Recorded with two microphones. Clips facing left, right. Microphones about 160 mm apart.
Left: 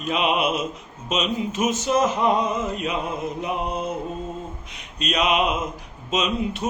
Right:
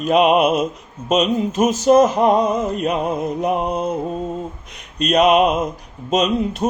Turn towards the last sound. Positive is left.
turn(degrees=-40)  # may be behind; listen again after turning